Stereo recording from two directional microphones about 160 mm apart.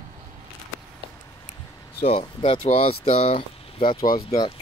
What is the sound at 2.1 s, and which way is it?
Speech, 30° left (ahead or behind).